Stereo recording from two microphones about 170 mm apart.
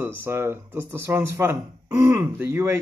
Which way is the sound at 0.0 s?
15° right (ahead or behind).